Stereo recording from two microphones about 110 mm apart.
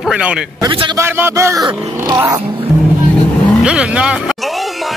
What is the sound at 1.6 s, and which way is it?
Speech, 35° right (ahead or behind).